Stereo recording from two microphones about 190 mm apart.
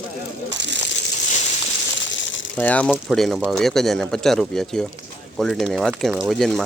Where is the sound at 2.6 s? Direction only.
5° left (ahead or behind).